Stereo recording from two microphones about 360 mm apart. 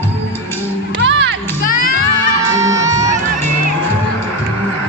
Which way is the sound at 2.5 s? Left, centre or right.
Centre.